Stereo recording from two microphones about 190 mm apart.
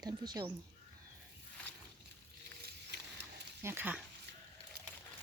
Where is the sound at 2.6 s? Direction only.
60° right (ahead or behind).